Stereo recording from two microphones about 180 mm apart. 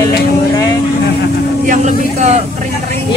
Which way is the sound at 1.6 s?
45° right (ahead or behind).